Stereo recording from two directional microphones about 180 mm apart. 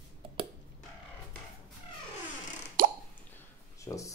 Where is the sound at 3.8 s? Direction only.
15° left (ahead or behind).